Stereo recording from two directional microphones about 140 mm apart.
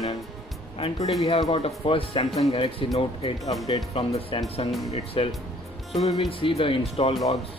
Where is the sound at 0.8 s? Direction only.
45° left (ahead or behind).